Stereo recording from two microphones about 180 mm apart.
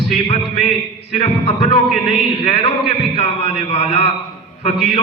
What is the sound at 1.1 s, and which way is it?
A man's voice, 35° left (ahead or behind).